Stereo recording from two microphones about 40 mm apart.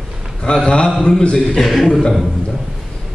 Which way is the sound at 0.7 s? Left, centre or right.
Left.